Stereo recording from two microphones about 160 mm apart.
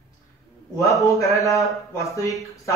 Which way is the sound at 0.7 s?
20° left (ahead or behind).